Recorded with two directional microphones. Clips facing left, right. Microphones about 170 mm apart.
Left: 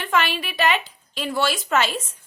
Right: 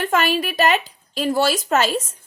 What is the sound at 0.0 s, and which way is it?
Speech, 45° right (ahead or behind).